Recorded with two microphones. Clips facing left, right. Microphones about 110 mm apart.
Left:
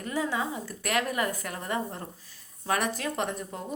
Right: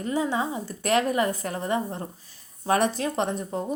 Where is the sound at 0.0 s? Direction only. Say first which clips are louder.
Right 4 dB; 25° right (ahead or behind).